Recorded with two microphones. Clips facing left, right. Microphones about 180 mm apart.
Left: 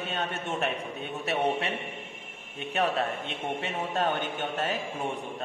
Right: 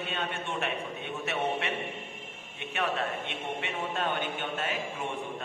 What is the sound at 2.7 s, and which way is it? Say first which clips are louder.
A man's voice: left 4 dB; 35° left (ahead or behind).